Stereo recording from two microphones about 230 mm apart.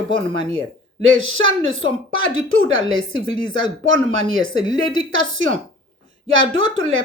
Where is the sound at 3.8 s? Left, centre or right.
Right.